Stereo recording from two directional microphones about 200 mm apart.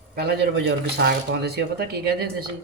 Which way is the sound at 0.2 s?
55° right (ahead or behind).